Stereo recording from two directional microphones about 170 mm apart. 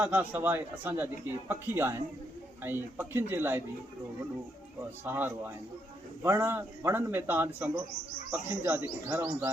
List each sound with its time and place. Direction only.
0.0 s a man's voice: 10° right (ahead or behind)
5.0 s a man's voice: 10° right (ahead or behind)